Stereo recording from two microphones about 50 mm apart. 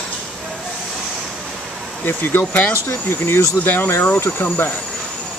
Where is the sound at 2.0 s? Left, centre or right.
Left.